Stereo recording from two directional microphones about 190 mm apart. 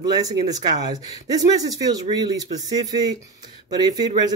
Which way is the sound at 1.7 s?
20° right (ahead or behind).